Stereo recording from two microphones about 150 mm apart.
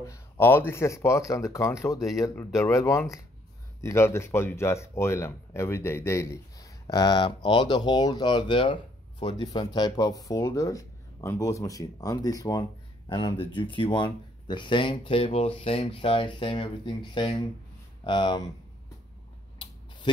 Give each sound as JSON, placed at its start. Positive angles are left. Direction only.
{"t": 0.0, "sound": "speech", "side_deg": 15}